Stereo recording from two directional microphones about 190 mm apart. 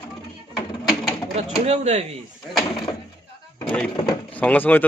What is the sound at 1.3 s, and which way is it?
Speech, 35° right (ahead or behind).